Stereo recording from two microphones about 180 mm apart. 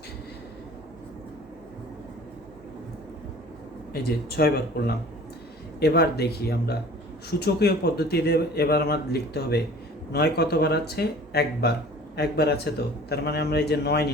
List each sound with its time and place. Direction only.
3.9 s speech: 60° left (ahead or behind)